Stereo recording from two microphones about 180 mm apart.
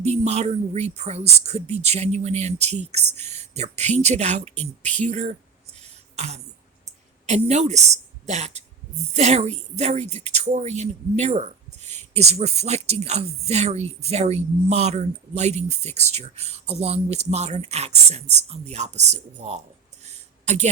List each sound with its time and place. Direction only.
0.0 s speech: 40° right (ahead or behind)
5.8 s beatboxing: 35° right (ahead or behind)
7.3 s a woman's voice: 40° right (ahead or behind)
20.1 s a sound: 40° right (ahead or behind)